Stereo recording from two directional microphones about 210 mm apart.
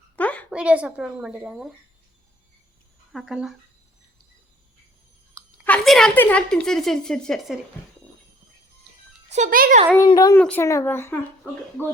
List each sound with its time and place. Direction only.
0.2 s a sound: 5° left (ahead or behind)
0.5 s speech: 5° right (ahead or behind)
3.1 s speech: centre (ahead or behind)
5.6 s speech: 5° left (ahead or behind)
9.3 s a child's voice: 40° right (ahead or behind)
10.1 s speech: 20° left (ahead or behind)